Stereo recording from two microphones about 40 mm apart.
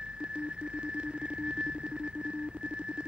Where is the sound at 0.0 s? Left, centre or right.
Right.